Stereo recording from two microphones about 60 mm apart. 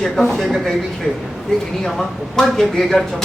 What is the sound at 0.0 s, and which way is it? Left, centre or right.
Speech, centre.